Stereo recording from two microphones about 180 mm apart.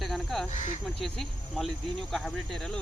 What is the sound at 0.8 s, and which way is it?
Speech, centre (ahead or behind).